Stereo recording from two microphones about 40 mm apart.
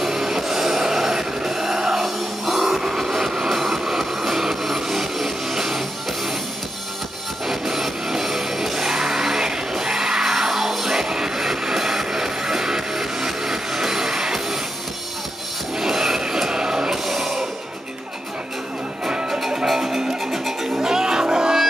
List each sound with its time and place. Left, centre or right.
0.0 s a sound: centre
7.4 s music: centre
15.8 s music: centre
17.0 s music: centre
19.0 s music: right